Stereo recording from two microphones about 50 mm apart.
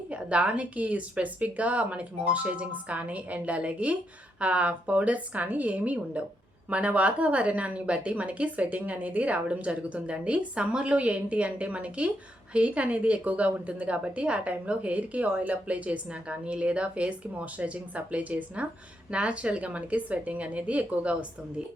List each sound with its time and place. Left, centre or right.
0.1 s a woman's voice: right